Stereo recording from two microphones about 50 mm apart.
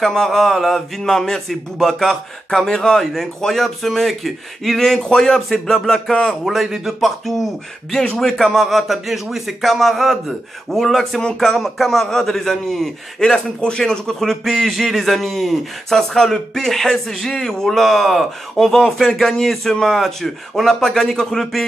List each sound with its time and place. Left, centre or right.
0.0 s speech: centre
13.2 s a man's voice: centre